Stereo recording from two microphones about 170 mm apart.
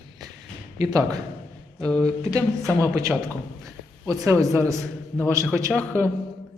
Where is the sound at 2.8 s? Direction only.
20° right (ahead or behind).